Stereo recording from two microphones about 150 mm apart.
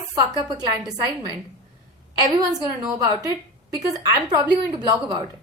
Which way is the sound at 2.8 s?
30° right (ahead or behind).